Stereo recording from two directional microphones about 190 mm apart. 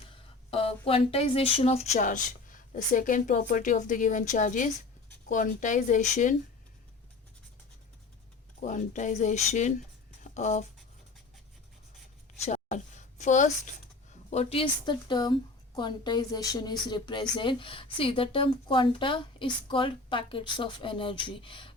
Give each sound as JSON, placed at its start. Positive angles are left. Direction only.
{"t": 0.5, "sound": "speech", "side_deg": 30}
{"t": 8.6, "sound": "speech", "side_deg": 40}
{"t": 12.5, "sound": "a sound", "side_deg": 40}
{"t": 14.3, "sound": "a woman's voice", "side_deg": 30}